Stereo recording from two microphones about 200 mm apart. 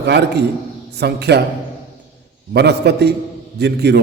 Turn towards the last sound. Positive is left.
turn(degrees=-55)  # may be behind; listen again after turning